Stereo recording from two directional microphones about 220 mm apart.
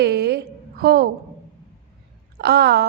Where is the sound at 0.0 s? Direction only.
45° right (ahead or behind).